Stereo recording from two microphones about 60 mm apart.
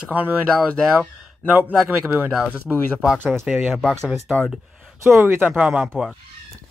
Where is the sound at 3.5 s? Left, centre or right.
Right.